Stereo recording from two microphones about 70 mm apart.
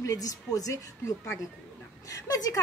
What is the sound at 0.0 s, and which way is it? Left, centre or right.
A woman's voice, left.